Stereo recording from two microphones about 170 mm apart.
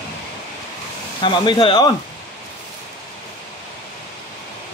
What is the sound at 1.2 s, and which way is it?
Speech, 30° left (ahead or behind).